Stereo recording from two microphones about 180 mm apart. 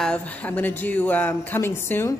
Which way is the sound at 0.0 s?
5° left (ahead or behind).